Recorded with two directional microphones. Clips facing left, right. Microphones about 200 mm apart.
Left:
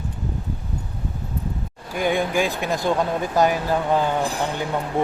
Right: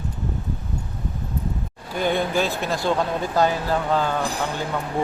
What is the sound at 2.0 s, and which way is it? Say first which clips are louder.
Speech: left 1 dB; 10° left (ahead or behind).